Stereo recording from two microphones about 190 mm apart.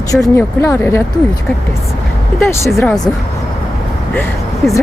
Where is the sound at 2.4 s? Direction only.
15° left (ahead or behind).